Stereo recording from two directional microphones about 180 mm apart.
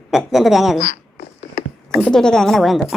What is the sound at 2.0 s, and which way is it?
Speech, 5° left (ahead or behind).